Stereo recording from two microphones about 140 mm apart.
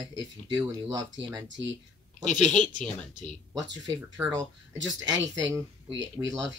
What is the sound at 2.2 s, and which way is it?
Speech, 60° left (ahead or behind).